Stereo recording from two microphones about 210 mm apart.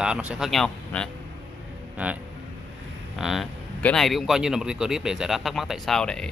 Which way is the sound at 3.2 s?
Centre (ahead or behind).